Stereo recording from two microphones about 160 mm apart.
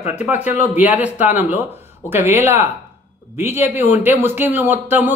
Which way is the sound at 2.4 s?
15° right (ahead or behind).